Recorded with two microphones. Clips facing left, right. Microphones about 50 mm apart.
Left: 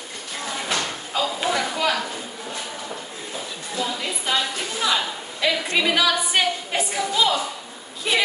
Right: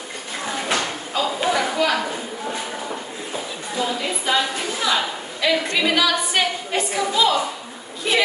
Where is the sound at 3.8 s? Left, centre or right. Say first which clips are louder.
Right 3 dB; centre.